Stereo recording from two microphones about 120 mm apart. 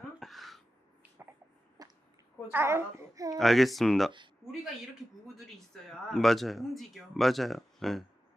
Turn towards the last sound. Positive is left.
turn(degrees=0)  # may be behind; listen again after turning